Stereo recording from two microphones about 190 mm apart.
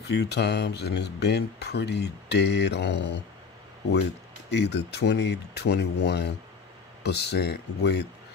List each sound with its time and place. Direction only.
0.1 s speech: 65° left (ahead or behind)
4.5 s speech: 65° left (ahead or behind)